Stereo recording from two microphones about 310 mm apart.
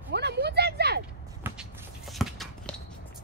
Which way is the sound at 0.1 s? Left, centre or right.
Right.